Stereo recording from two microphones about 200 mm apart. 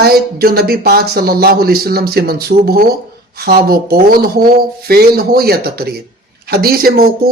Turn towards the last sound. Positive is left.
turn(degrees=-50)  # may be behind; listen again after turning